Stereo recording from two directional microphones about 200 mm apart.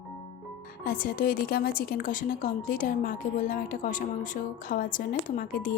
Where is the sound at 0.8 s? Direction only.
45° left (ahead or behind).